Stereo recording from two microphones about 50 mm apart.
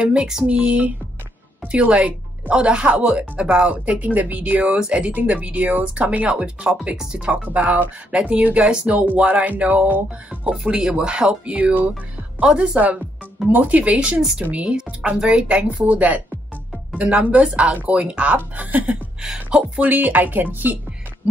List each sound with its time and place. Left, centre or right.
0.0 s speech: right
10.7 s speech: centre
13.5 s speech: right
19.2 s speech: centre
19.8 s speech: right